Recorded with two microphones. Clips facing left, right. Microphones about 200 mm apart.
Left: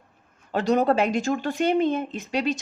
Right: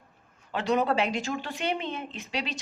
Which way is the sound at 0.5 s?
40° left (ahead or behind).